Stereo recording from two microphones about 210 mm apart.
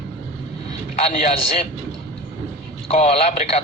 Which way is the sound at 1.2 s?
30° left (ahead or behind).